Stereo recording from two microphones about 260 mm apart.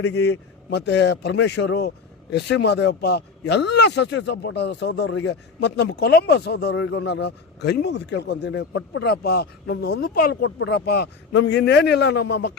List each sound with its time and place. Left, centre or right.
0.0 s speech: left